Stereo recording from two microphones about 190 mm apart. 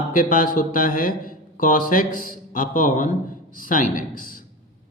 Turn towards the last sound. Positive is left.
turn(degrees=45)  # may be behind; listen again after turning